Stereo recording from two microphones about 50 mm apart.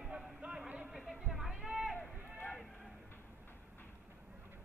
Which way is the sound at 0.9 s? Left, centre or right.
Centre.